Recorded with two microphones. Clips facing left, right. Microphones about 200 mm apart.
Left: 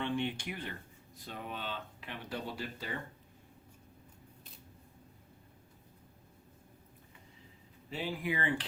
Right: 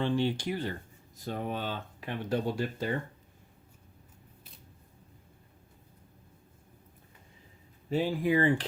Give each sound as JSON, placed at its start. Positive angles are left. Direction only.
{"t": 0.0, "sound": "speech", "side_deg": -35}
{"t": 7.9, "sound": "speech", "side_deg": -45}